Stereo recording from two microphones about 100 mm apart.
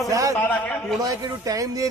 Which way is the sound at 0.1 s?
35° right (ahead or behind).